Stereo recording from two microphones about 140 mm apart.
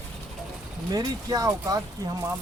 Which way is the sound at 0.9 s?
25° right (ahead or behind).